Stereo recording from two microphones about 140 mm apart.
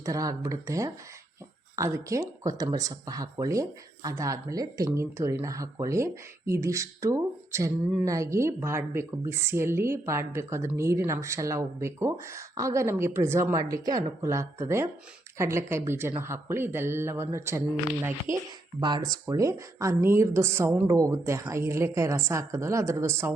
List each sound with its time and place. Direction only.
0.0 s speech: 25° right (ahead or behind)
18.8 s speech: 30° right (ahead or behind)